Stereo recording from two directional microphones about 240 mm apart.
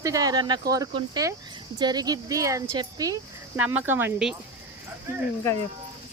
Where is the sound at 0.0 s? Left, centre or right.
Centre.